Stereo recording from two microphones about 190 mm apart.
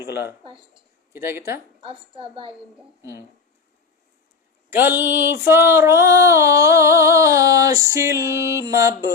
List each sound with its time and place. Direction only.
0.7 s speech: 15° right (ahead or behind)
1.8 s a woman's voice: 25° right (ahead or behind)
4.7 s music: 10° right (ahead or behind)